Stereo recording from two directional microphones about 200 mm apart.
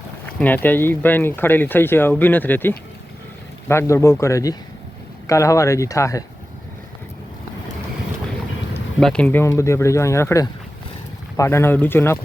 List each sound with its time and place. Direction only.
0.3 s speech: 10° left (ahead or behind)
9.0 s speech: 5° left (ahead or behind)